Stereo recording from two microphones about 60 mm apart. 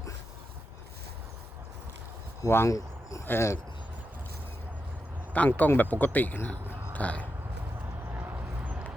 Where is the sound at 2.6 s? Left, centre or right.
Left.